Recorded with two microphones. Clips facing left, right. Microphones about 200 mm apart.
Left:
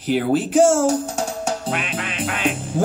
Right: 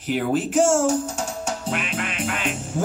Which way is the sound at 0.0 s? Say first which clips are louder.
Left 3 dB; 35° left (ahead or behind).